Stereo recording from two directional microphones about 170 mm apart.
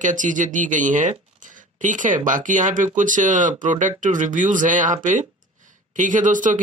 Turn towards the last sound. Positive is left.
turn(degrees=-50)  # may be behind; listen again after turning